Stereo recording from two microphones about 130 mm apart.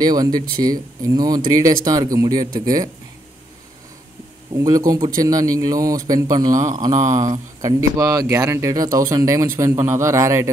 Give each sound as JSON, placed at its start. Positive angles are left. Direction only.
{"t": 0.0, "sound": "a man's voice", "side_deg": -30}
{"t": 4.6, "sound": "a man's voice", "side_deg": -25}